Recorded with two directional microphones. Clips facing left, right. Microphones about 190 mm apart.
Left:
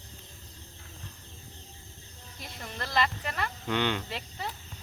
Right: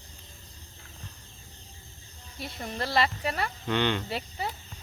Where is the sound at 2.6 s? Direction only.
30° right (ahead or behind).